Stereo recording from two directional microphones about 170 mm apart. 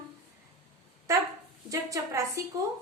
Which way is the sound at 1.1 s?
20° right (ahead or behind).